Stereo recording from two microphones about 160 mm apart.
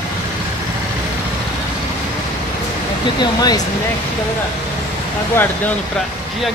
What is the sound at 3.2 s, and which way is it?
Speech, 25° left (ahead or behind).